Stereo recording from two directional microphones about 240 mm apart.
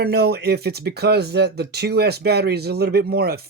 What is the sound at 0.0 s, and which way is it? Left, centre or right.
Speech, right.